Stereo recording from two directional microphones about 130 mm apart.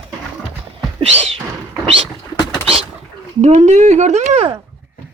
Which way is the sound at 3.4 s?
60° right (ahead or behind).